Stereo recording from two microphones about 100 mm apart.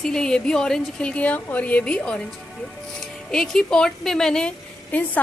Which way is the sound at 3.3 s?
5° left (ahead or behind).